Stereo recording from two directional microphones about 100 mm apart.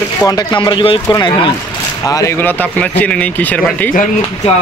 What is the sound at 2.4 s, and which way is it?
Speech, 15° left (ahead or behind).